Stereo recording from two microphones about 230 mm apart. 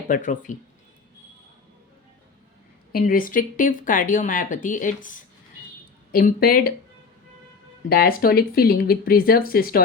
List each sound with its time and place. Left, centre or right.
0.1 s speech: left
2.9 s speech: left
7.9 s speech: left